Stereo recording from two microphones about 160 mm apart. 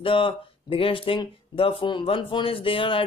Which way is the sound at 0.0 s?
35° left (ahead or behind).